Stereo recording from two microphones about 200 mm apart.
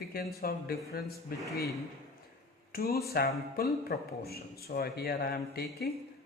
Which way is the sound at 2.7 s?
50° left (ahead or behind).